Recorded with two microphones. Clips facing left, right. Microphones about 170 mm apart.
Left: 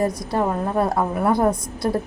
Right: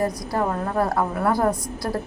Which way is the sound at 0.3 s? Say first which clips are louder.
Left 2 dB; 20° left (ahead or behind).